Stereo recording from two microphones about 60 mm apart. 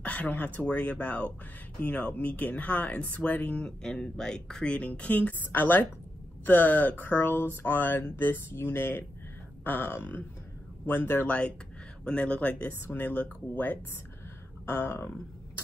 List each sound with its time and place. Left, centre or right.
0.0 s speech: left
12.0 s speech: centre
14.7 s speech: left